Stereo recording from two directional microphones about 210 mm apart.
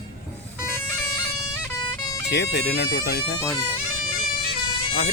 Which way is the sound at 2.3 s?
55° left (ahead or behind).